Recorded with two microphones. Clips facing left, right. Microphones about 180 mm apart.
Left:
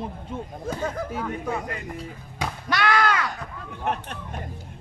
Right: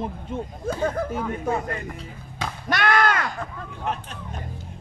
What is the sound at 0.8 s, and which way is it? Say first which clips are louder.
Speech: right 5 dB; 50° right (ahead or behind).